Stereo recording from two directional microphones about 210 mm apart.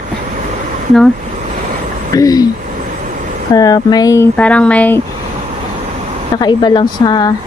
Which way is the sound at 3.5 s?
15° left (ahead or behind).